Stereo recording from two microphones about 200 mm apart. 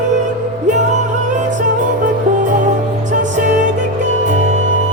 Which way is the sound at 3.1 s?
40° right (ahead or behind).